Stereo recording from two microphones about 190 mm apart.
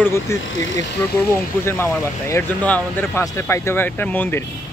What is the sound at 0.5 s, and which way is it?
Speech, 85° left.